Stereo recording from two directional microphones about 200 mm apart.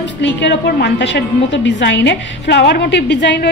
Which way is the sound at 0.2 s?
55° left (ahead or behind).